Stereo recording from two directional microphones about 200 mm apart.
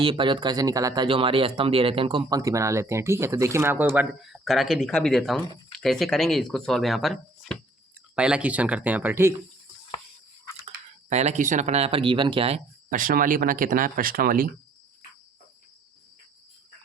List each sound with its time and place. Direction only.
0.0 s speech: 25° right (ahead or behind); by 9.3 s 10° right (ahead or behind)
11.1 s speech: 35° right (ahead or behind)